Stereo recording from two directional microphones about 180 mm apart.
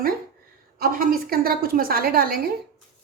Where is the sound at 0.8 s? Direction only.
55° right (ahead or behind).